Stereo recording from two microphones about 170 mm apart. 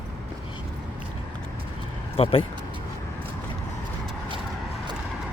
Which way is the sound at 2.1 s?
35° left (ahead or behind).